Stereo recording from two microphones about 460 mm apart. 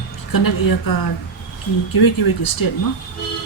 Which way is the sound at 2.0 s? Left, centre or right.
Left.